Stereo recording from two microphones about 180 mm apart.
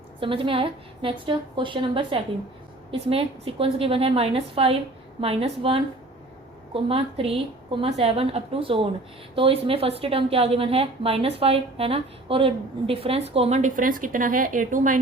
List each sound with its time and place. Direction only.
0.2 s a woman's voice: 30° right (ahead or behind); by 14.9 s 50° right (ahead or behind)